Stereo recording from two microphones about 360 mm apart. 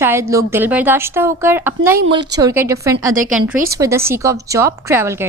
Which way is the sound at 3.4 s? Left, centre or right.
Right.